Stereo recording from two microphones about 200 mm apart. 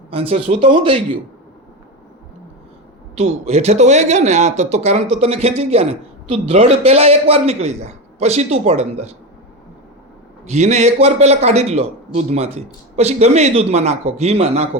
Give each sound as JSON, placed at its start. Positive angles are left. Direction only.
{"t": 0.1, "sound": "speech", "side_deg": -30}
{"t": 3.2, "sound": "speech", "side_deg": -30}
{"t": 10.5, "sound": "speech", "side_deg": -35}